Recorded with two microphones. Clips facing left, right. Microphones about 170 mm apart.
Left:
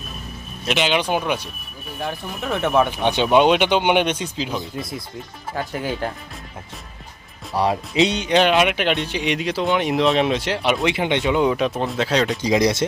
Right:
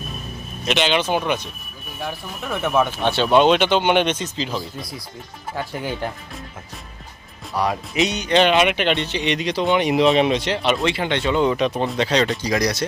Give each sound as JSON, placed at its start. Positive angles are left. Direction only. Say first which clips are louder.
{"t": 0.6, "sound": "speech", "louder": "even", "side_deg": 5}
{"t": 2.7, "sound": "speech", "louder": "even", "side_deg": 15}
{"t": 5.5, "sound": "speech", "louder": "left 1 dB", "side_deg": 10}
{"t": 7.5, "sound": "speech", "louder": "left 2 dB", "side_deg": 30}
{"t": 8.3, "sound": "speech", "louder": "right 3 dB", "side_deg": 5}
{"t": 12.4, "sound": "speech", "louder": "left 3 dB", "side_deg": 25}